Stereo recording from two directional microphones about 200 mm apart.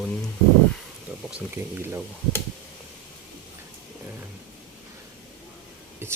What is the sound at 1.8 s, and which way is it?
Speech, 10° right (ahead or behind).